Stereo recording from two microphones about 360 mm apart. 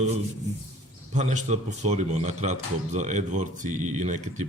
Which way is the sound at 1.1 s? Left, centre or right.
Centre.